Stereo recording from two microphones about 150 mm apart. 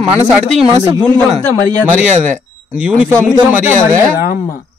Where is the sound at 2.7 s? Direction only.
10° right (ahead or behind).